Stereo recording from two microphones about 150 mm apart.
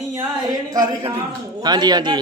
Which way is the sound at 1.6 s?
30° right (ahead or behind).